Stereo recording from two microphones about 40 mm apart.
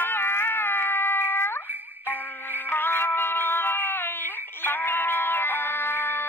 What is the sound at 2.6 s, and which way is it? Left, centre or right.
Music, left.